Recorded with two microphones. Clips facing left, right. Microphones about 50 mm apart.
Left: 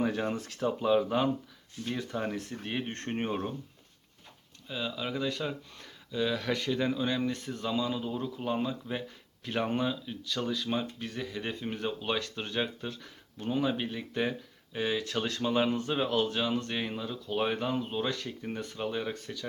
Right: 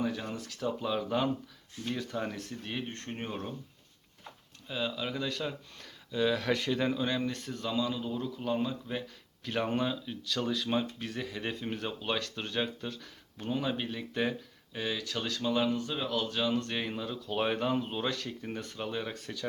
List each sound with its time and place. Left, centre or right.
0.1 s speech: left
0.8 s speech: centre
4.7 s speech: centre
14.8 s speech: centre